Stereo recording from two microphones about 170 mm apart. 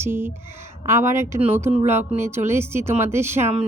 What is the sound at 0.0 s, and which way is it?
A woman's voice, 10° right (ahead or behind).